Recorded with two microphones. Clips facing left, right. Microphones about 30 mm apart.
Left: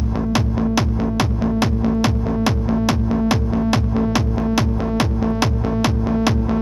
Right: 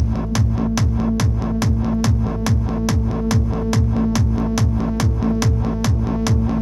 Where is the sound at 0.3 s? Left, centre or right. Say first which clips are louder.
Left 3 dB; left.